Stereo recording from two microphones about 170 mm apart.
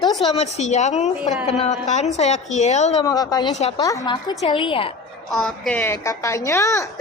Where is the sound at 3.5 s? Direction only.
40° left (ahead or behind).